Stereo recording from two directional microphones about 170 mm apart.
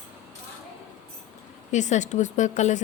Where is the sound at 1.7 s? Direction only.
45° left (ahead or behind).